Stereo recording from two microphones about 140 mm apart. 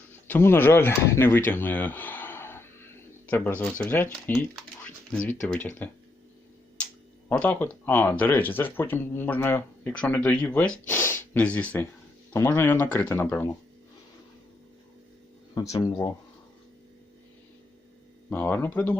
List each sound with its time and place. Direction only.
0.3 s speech: 15° left (ahead or behind)
4.5 s speech: 5° left (ahead or behind)
7.3 s speech: 10° left (ahead or behind)
15.5 s speech: 25° left (ahead or behind)
18.3 s speech: 15° left (ahead or behind)